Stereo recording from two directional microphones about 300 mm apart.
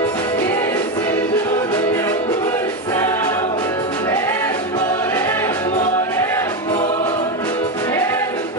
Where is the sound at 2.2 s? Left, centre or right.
Left.